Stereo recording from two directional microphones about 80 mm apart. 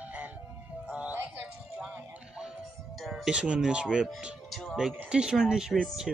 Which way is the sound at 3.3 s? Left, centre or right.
Centre.